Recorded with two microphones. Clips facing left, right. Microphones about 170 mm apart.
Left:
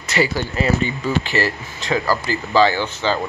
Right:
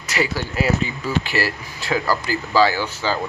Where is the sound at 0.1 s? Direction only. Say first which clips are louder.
Left 3 dB; 5° right (ahead or behind).